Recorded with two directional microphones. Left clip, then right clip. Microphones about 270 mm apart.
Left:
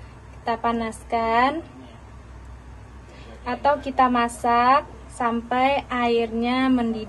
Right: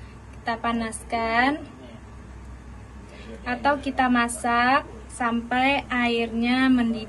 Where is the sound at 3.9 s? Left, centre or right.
Left.